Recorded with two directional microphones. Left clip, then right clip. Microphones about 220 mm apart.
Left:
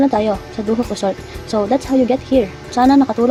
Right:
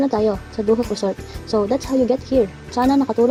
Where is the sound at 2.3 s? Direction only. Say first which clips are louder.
Left 3 dB; 20° right (ahead or behind).